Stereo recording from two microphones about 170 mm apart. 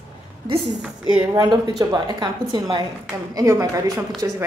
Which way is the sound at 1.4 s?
25° right (ahead or behind).